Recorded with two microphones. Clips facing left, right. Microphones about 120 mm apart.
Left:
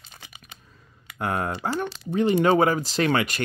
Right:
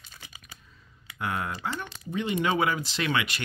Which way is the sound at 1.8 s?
35° left (ahead or behind).